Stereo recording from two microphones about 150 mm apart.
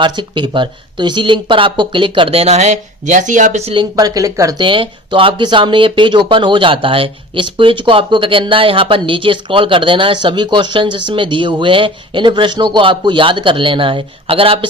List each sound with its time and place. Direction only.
0.0 s speech: 30° right (ahead or behind)
3.9 s speech: 25° right (ahead or behind)